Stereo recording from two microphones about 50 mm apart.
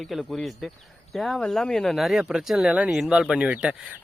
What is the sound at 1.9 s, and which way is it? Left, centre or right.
Speech, centre.